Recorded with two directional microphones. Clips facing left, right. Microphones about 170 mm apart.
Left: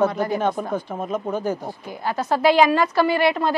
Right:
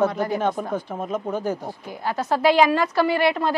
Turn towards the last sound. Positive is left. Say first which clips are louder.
# left 1 dB
turn(degrees=10)  # may be behind; listen again after turning